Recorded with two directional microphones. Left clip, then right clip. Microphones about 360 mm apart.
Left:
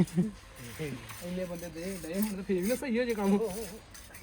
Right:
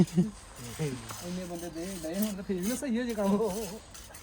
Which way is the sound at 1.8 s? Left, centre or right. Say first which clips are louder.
Right 1 dB; centre.